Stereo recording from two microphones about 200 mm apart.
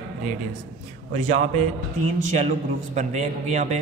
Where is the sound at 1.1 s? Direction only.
30° right (ahead or behind).